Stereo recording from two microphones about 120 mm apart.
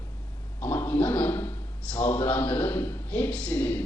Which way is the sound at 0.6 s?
15° left (ahead or behind).